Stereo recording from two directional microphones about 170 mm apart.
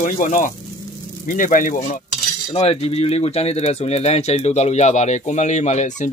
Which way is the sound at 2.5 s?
35° left (ahead or behind).